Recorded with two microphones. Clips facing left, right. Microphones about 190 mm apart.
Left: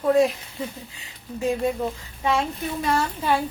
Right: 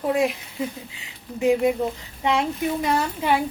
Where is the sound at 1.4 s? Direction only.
15° right (ahead or behind).